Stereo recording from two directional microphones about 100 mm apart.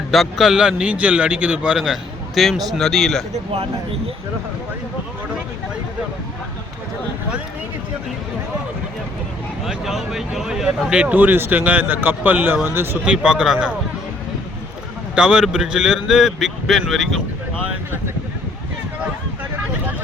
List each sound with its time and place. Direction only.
0.1 s a man's voice: centre (ahead or behind)
9.6 s speech: 5° right (ahead or behind); by 13.0 s 20° right (ahead or behind)
13.1 s speech: 10° right (ahead or behind)
15.1 s a man's voice: 10° right (ahead or behind)